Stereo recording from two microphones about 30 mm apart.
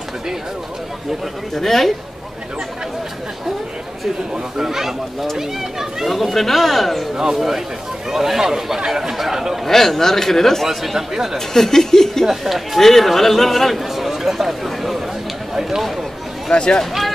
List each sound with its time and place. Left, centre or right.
1.5 s speech: centre
4.6 s speech: centre
6.0 s a man's voice: centre
7.3 s speech: centre
9.7 s speech: centre
10.6 s speech: centre
11.3 s speech: centre
12.3 s a man's voice: centre
12.7 s a man's voice: centre
15.8 s run: centre
16.5 s speech: left